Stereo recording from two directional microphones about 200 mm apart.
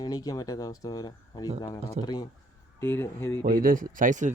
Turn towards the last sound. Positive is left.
turn(degrees=-40)  # may be behind; listen again after turning